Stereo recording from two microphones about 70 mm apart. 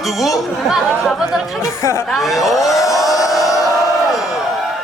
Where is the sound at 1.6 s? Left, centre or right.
Left.